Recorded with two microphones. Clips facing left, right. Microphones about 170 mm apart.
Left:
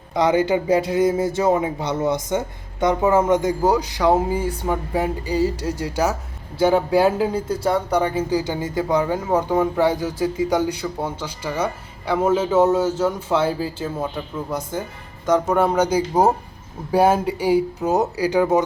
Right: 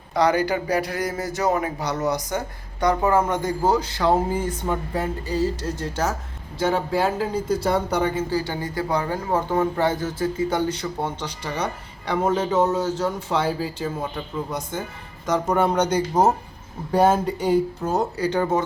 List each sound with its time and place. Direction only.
0.1 s speech: 20° left (ahead or behind); by 8.2 s 5° left (ahead or behind)
8.3 s speech: 20° left (ahead or behind)
15.3 s speech: centre (ahead or behind)